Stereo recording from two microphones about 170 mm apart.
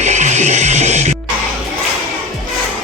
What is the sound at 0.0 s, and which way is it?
Music, 45° right (ahead or behind).